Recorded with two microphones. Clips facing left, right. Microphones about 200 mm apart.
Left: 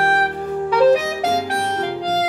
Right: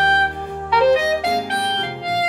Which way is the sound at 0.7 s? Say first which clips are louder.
Left 1 dB; 40° left (ahead or behind).